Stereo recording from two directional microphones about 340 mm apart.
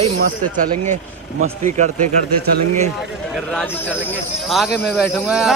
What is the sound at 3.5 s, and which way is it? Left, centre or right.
Speech, centre.